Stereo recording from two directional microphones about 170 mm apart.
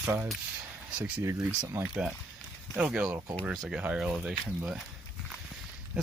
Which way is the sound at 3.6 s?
5° right (ahead or behind).